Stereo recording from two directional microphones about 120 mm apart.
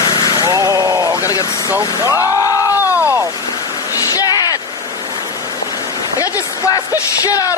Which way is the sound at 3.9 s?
30° left (ahead or behind).